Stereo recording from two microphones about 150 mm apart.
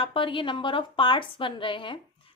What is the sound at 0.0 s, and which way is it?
A woman's voice, 35° left (ahead or behind).